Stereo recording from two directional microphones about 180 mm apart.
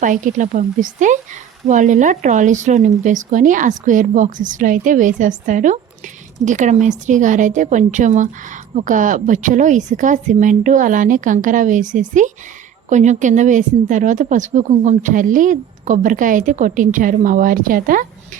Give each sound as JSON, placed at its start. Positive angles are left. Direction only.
{"t": 0.0, "sound": "a woman's voice", "side_deg": -45}